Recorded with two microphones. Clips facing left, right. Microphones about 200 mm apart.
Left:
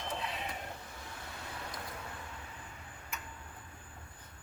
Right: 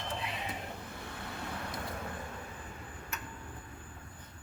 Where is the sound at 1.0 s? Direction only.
60° right (ahead or behind).